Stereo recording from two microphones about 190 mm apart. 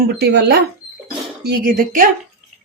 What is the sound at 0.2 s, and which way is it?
Speech, 60° right (ahead or behind).